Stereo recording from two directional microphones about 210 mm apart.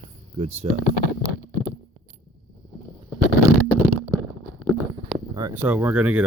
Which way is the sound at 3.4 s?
15° right (ahead or behind).